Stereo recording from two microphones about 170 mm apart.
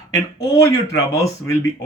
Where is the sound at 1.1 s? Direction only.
15° left (ahead or behind).